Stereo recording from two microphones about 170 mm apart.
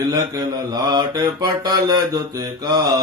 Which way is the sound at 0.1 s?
25° right (ahead or behind).